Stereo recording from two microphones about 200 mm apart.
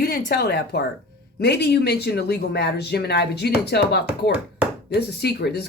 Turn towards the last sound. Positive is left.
turn(degrees=55)  # may be behind; listen again after turning